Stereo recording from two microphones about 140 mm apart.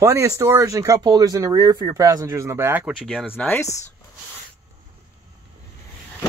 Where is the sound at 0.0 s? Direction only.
20° right (ahead or behind).